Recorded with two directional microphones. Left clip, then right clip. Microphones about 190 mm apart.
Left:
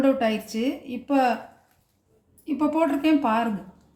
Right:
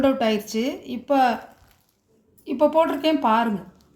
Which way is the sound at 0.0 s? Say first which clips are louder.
Right 2 dB; 50° right (ahead or behind).